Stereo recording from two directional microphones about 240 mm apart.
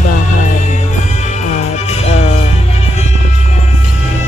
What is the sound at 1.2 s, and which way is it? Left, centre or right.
Music, left.